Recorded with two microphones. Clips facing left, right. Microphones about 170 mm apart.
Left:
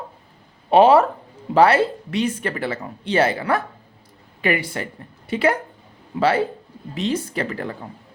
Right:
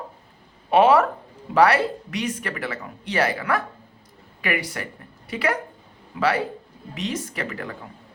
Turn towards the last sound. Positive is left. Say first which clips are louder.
# left 5 dB
turn(degrees=30)  # may be behind; listen again after turning